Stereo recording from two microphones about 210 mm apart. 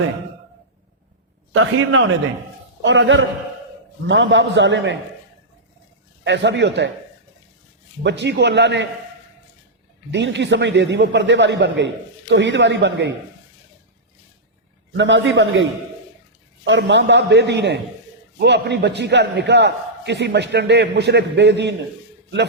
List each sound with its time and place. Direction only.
1.5 s a man's voice: 70° right (ahead or behind)
6.2 s a man's voice: 60° right (ahead or behind)
8.0 s a man's voice: 55° right (ahead or behind)
10.1 s a man's voice: 55° right (ahead or behind)
14.9 s a man's voice: 60° right (ahead or behind)
16.6 s a man's voice: 60° right (ahead or behind)